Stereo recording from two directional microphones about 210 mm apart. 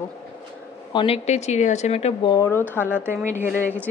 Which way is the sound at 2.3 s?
15° left (ahead or behind).